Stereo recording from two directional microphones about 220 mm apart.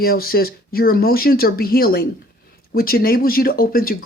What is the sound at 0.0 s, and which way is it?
Speech, 45° left (ahead or behind).